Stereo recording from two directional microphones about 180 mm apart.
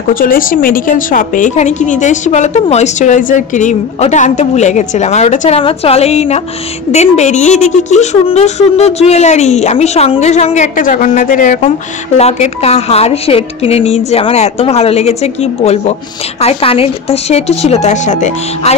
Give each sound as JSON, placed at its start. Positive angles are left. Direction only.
{"t": 0.1, "sound": "a woman's voice", "side_deg": 50}
{"t": 12.2, "sound": "speech", "side_deg": 35}